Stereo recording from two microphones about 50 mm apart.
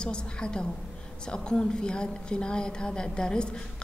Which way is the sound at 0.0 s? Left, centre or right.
Centre.